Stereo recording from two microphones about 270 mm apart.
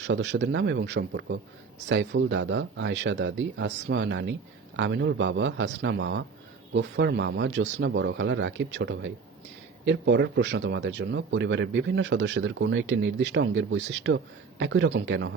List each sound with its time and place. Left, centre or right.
0.0 s speech: right